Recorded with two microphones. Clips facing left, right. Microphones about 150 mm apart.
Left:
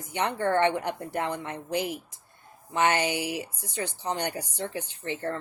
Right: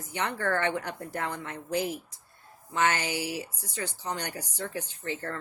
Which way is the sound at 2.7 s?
15° left (ahead or behind).